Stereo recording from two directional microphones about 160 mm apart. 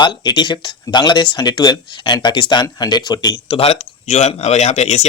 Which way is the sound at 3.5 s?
40° left (ahead or behind).